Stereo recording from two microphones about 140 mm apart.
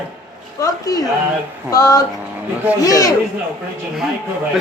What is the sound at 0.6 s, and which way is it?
A child's voice, 25° left (ahead or behind).